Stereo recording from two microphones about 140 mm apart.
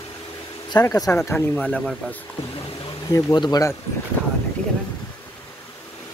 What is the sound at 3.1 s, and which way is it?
Speech, 30° left (ahead or behind).